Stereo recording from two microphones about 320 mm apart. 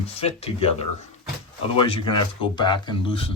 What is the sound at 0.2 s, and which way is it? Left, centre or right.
Speech, centre.